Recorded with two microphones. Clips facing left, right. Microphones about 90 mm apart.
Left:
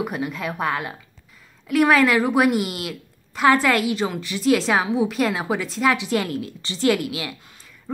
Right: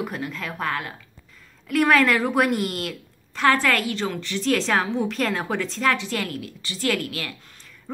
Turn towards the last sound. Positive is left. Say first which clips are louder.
# left 2 dB
turn(degrees=10)  # may be behind; listen again after turning